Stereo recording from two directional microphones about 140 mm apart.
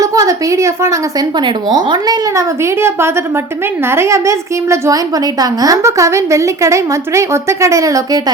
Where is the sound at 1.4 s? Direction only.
30° right (ahead or behind).